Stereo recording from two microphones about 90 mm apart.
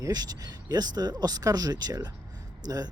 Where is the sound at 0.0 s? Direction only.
45° right (ahead or behind).